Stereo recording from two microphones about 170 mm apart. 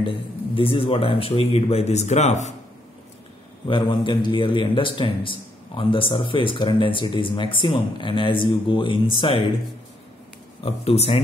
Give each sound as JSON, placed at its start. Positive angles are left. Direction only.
{"t": 0.0, "sound": "speech", "side_deg": 30}
{"t": 3.6, "sound": "a man's voice", "side_deg": 30}
{"t": 10.6, "sound": "speech", "side_deg": 35}